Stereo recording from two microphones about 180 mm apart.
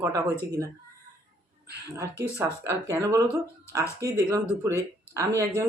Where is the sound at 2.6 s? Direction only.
15° right (ahead or behind).